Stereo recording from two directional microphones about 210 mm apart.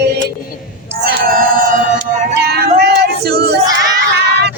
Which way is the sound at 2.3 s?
50° right (ahead or behind).